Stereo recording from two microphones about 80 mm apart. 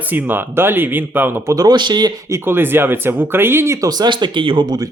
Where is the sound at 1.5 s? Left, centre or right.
Right.